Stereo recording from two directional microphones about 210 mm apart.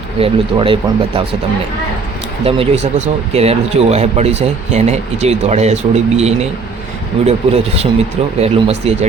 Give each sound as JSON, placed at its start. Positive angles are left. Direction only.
{"t": 0.2, "sound": "speech", "side_deg": -25}
{"t": 2.4, "sound": "speech", "side_deg": -30}